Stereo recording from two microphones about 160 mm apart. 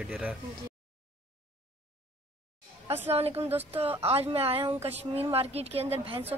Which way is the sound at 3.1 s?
40° right (ahead or behind).